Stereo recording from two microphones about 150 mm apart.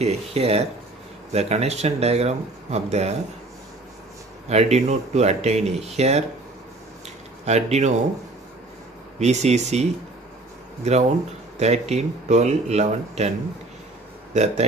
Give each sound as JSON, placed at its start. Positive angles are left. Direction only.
{"t": 0.0, "sound": "speech", "side_deg": -45}
{"t": 4.5, "sound": "speech", "side_deg": -45}
{"t": 7.4, "sound": "speech", "side_deg": -50}
{"t": 9.2, "sound": "speech", "side_deg": -50}